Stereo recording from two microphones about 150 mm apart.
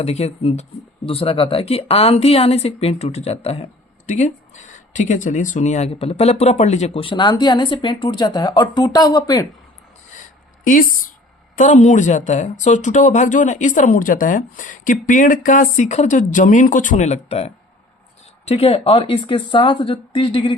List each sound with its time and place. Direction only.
0.0 s speech: 45° left (ahead or behind); by 9.5 s 25° left (ahead or behind)
10.6 s speech: 65° left (ahead or behind); by 20.6 s 35° left (ahead or behind)